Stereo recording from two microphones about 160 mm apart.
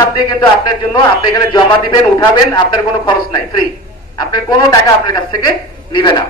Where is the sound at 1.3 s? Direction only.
25° left (ahead or behind).